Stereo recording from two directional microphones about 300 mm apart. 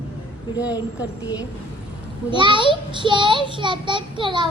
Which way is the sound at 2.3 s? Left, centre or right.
Centre.